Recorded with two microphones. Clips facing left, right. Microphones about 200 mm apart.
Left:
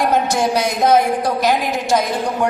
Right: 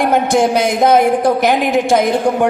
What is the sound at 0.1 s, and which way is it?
A woman's voice, 55° right (ahead or behind).